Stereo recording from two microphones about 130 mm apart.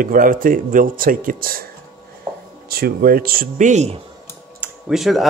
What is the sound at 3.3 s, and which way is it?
Speech, 80° right.